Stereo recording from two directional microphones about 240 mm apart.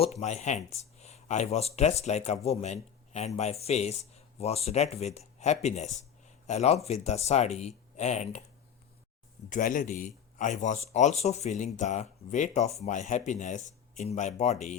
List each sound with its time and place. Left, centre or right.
0.0 s speech: left
9.5 s speech: left